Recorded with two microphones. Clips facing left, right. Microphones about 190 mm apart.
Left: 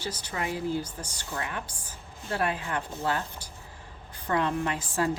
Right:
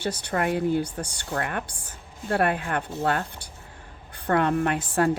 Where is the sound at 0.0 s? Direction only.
65° right (ahead or behind).